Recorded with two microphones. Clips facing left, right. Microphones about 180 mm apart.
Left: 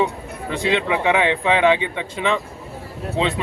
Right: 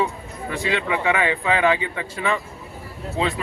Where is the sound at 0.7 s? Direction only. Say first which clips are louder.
Left 3 dB; 20° left (ahead or behind).